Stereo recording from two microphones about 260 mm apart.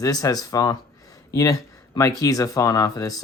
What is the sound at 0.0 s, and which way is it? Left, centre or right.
Speech, centre.